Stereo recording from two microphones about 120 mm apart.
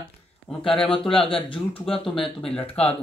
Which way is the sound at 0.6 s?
50° left (ahead or behind).